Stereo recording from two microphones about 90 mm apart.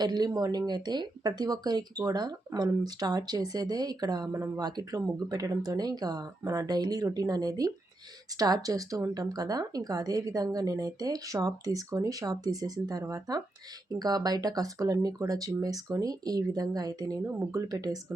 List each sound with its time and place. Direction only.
0.0 s speech: 50° right (ahead or behind)